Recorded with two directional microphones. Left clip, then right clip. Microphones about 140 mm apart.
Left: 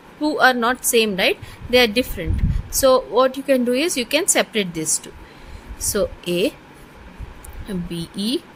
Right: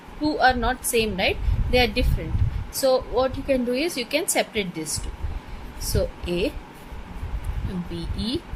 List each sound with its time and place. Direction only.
0.2 s a woman's voice: 45° left (ahead or behind)
7.9 s a woman's voice: 45° left (ahead or behind)